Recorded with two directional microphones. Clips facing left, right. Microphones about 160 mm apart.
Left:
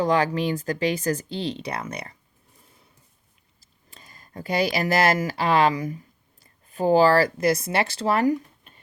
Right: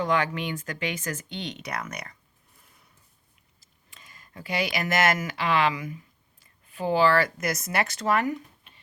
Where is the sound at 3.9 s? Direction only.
40° left (ahead or behind).